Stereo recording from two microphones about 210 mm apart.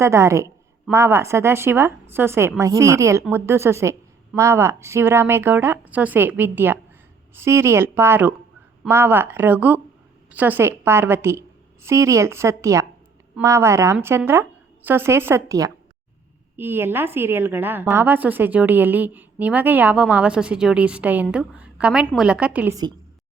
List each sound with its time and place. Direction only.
0.0 s a woman's voice: 15° right (ahead or behind)